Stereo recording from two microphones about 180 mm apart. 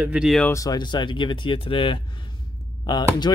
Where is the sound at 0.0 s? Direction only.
5° right (ahead or behind).